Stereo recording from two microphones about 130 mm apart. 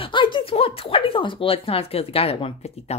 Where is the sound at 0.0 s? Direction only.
40° left (ahead or behind).